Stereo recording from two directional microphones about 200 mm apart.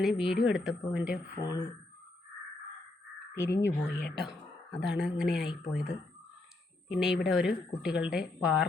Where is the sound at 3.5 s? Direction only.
55° left (ahead or behind).